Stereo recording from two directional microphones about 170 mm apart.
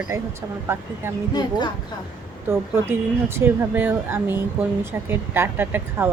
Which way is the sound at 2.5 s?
15° right (ahead or behind).